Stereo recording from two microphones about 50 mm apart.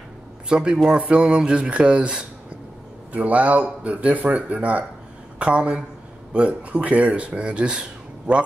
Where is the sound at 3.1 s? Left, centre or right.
Right.